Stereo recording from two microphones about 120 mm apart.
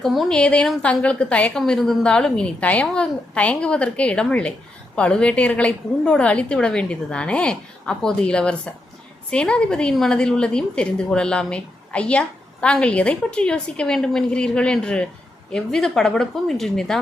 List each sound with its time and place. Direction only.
0.0 s a woman's voice: centre (ahead or behind)